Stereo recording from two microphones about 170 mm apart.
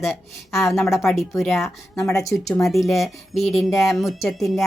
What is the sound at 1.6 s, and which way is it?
Speech, 15° left (ahead or behind).